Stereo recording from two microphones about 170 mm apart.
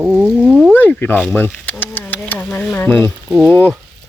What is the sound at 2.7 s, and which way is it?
Speech, 15° left (ahead or behind).